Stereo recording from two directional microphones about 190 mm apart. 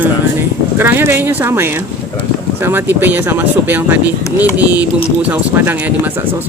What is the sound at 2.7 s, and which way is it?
Speech, 10° right (ahead or behind).